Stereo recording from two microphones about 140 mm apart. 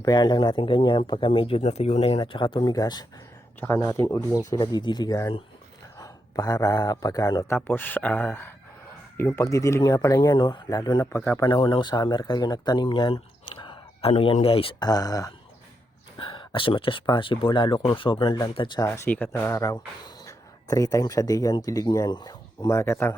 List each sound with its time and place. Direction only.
0.0 s speech: 30° left (ahead or behind)
4.5 s a man's voice: 30° left (ahead or behind)
7.7 s speech: 15° left (ahead or behind)
11.0 s speech: 15° left (ahead or behind)
11.3 s speech: 30° left (ahead or behind)
14.8 s speech: 25° left (ahead or behind)
16.1 s speech: 35° left (ahead or behind)
18.9 s speech: 15° left (ahead or behind); by 22.8 s 30° left (ahead or behind)
22.8 s speech: 15° left (ahead or behind)